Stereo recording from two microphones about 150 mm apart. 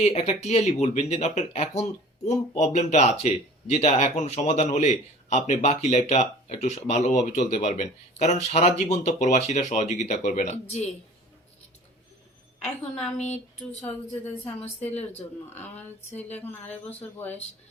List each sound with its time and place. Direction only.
0.0 s speech: 45° left (ahead or behind)
13.1 s speech: 50° left (ahead or behind)
14.6 s speech: 10° left (ahead or behind)